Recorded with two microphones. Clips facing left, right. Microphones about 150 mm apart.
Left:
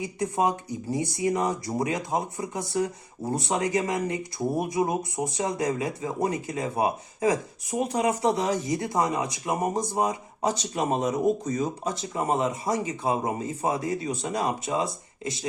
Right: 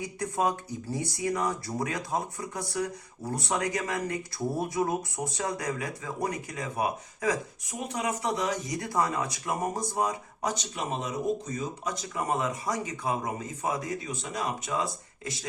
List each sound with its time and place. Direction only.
0.0 s speech: 20° left (ahead or behind)
11.9 s speech: 25° left (ahead or behind)
14.7 s speech: 25° left (ahead or behind)